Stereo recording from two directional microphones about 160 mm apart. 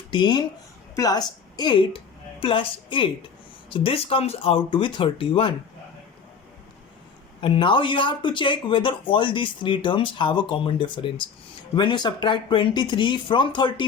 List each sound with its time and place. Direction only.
0.1 s speech: 25° left (ahead or behind)
7.4 s speech: 30° left (ahead or behind)